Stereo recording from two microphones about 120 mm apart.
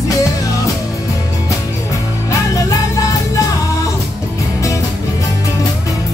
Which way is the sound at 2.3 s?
25° left (ahead or behind).